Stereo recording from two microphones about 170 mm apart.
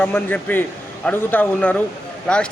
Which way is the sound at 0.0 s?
10° left (ahead or behind).